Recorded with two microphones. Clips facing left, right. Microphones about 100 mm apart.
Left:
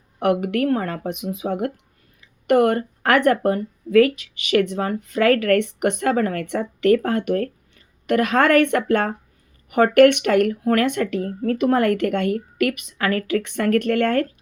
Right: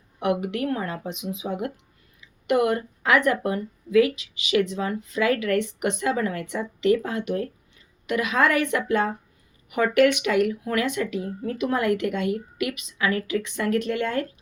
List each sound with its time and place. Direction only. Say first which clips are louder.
0.2 s speech: left 5 dB; 55° left (ahead or behind)